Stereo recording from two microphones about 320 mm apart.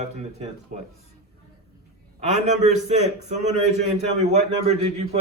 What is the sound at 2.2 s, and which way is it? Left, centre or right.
Speech, right.